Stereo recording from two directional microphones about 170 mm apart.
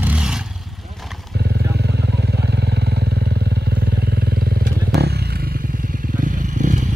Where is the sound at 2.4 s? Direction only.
75° right (ahead or behind).